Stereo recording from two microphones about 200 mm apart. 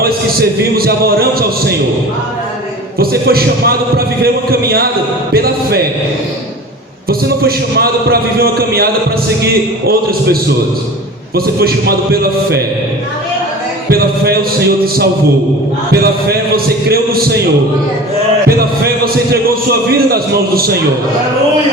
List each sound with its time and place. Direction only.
0.0 s a man's voice: 50° right (ahead or behind)
3.0 s a man's voice: 50° right (ahead or behind)
5.3 s a man's voice: 50° right (ahead or behind)
7.1 s a man's voice: 50° right (ahead or behind)
11.3 s a man's voice: 50° right (ahead or behind)
15.9 s a man's voice: 50° right (ahead or behind)
18.4 s a man's voice: 50° right (ahead or behind)